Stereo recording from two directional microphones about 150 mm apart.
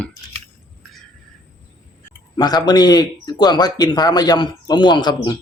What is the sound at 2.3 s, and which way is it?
Speech, 25° left (ahead or behind).